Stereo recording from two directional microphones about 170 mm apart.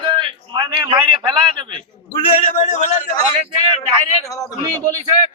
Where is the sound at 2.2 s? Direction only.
35° left (ahead or behind).